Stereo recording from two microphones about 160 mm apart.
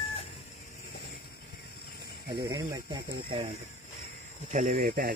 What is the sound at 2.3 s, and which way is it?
Speech, 25° right (ahead or behind).